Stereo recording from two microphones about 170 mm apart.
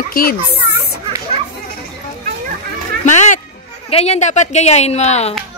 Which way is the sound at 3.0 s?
45° left (ahead or behind).